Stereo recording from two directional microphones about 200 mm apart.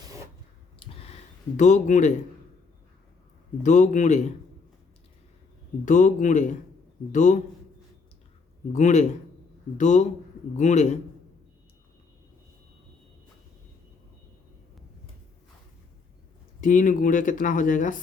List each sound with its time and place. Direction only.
0.8 s a sound: 35° left (ahead or behind)
3.6 s speech: 40° left (ahead or behind)
5.8 s speech: 40° left (ahead or behind)
8.7 s speech: 35° left (ahead or behind)
16.6 s speech: 40° left (ahead or behind)